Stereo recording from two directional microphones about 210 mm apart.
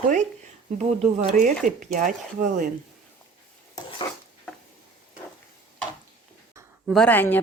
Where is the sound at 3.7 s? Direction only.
25° left (ahead or behind).